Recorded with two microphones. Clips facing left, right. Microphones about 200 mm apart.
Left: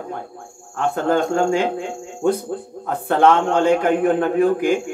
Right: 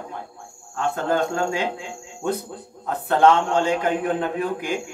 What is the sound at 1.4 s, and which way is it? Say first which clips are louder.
Speech: left 6 dB; 50° left (ahead or behind).